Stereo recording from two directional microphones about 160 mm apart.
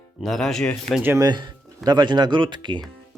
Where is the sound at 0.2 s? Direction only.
5° left (ahead or behind).